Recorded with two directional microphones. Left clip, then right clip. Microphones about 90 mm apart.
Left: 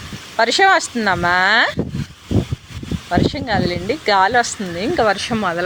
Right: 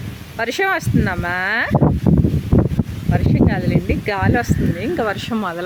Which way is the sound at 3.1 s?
45° right (ahead or behind).